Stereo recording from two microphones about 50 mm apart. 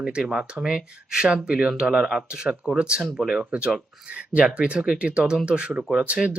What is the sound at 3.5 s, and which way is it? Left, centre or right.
Speech, right.